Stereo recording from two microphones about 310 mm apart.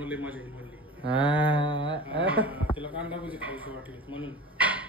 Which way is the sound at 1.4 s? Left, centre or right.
Centre.